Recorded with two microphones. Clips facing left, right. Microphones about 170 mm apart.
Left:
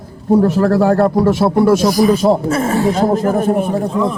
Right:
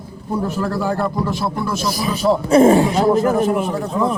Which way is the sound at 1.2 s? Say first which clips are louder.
Left 10 dB; 80° left.